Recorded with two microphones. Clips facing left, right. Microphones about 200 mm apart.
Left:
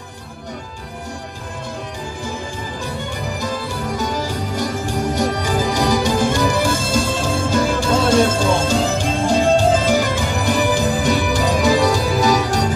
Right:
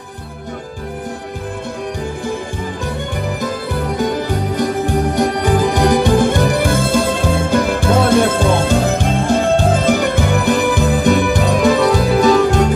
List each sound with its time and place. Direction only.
3.3 s music: 55° right (ahead or behind)